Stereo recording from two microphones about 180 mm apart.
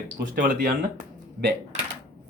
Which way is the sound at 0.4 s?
50° right (ahead or behind).